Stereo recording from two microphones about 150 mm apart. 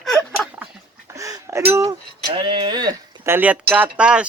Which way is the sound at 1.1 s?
25° right (ahead or behind).